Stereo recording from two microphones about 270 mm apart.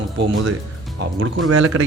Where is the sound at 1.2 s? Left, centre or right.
Right.